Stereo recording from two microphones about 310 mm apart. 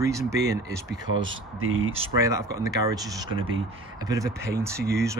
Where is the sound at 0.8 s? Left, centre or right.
Right.